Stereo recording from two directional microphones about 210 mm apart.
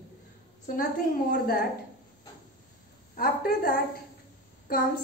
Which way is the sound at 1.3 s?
45° left (ahead or behind).